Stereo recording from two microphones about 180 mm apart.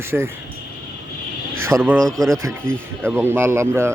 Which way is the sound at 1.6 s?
10° right (ahead or behind).